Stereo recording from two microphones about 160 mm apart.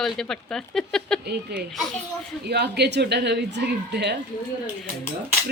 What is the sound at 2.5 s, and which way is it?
Speech, 90° right.